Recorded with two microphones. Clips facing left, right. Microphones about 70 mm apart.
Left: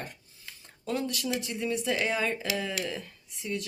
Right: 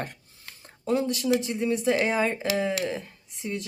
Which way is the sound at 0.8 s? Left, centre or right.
Right.